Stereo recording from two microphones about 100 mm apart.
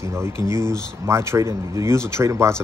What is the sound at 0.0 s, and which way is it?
Speech, 25° right (ahead or behind).